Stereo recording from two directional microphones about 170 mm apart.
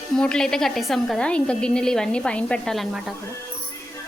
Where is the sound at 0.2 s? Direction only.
5° left (ahead or behind).